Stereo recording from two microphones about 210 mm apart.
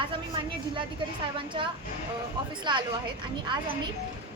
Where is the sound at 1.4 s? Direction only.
25° right (ahead or behind).